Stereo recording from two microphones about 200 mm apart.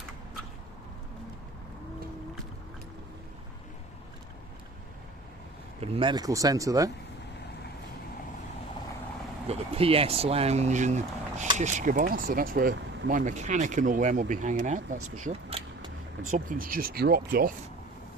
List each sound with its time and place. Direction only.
5.8 s speech: 30° right (ahead or behind)
9.5 s speech: 30° right (ahead or behind)
15.2 s vehicle: 30° right (ahead or behind)
16.3 s speech: 45° right (ahead or behind)